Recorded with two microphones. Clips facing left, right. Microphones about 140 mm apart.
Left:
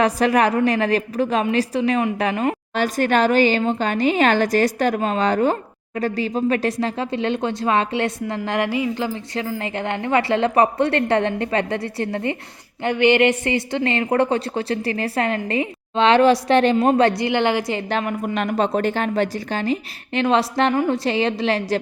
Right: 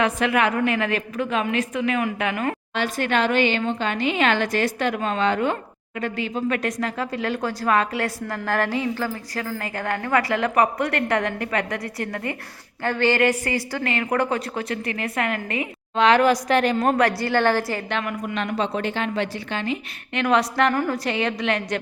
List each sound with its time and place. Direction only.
0.0 s a woman's voice: 40° left (ahead or behind)
2.7 s a woman's voice: 40° left (ahead or behind); by 9.0 s 10° left (ahead or behind)
9.0 s a woman's voice: 20° left (ahead or behind)
17.8 s a woman's voice: 40° left (ahead or behind)